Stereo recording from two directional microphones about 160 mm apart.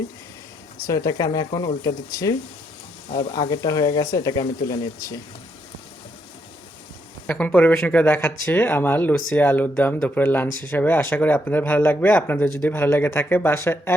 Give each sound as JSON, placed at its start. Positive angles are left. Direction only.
{"t": 0.9, "sound": "speech", "side_deg": 20}
{"t": 7.3, "sound": "speech", "side_deg": 10}